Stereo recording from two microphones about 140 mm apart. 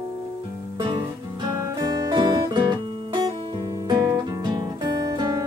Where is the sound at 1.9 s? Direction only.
25° right (ahead or behind).